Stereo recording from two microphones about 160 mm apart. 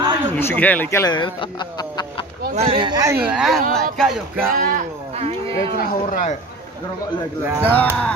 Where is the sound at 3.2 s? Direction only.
5° right (ahead or behind).